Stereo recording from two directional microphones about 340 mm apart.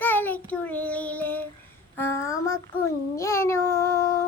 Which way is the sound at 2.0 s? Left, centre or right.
Centre.